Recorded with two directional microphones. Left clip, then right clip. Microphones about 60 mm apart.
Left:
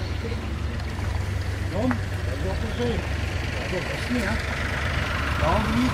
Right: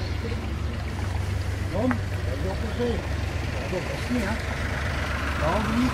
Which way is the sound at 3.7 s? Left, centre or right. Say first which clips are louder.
Left 1 dB; left.